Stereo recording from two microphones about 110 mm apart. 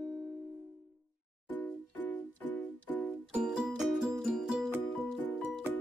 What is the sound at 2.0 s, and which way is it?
Music, 15° left (ahead or behind).